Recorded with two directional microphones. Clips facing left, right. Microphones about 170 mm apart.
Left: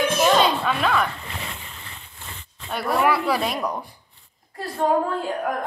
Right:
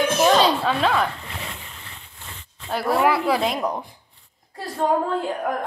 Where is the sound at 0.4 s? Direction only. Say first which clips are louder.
Right 1 dB; 30° right (ahead or behind).